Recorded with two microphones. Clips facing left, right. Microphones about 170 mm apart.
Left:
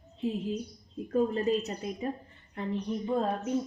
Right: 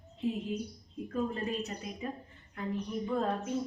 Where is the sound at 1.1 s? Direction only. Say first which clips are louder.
Left 7 dB; 35° left (ahead or behind).